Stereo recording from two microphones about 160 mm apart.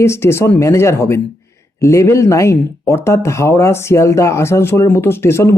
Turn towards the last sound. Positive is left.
turn(degrees=15)  # may be behind; listen again after turning